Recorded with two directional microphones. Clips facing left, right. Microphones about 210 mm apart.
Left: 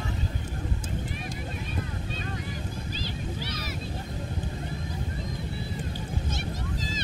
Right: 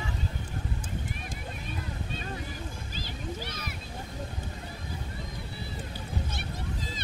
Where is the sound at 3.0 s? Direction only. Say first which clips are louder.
Right 2 dB; 50° right (ahead or behind).